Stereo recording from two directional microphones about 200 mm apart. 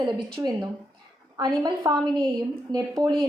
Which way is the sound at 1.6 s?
20° right (ahead or behind).